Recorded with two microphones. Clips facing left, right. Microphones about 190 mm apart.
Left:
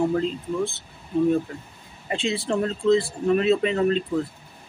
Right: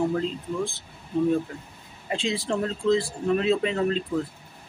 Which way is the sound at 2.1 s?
5° left (ahead or behind).